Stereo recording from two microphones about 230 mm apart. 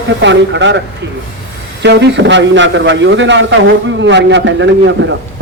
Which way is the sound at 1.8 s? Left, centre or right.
Right.